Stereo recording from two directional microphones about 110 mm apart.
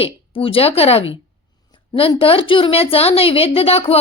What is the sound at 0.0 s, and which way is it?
A woman's voice, 55° left (ahead or behind).